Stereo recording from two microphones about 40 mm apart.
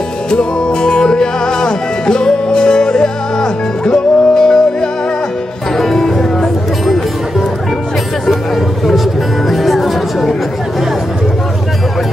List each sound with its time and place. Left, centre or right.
0.3 s music: left
5.8 s music: centre
8.5 s a sound: centre
9.5 s music: centre